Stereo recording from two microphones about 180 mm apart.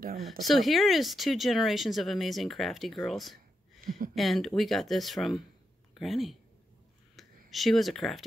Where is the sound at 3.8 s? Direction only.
50° right (ahead or behind).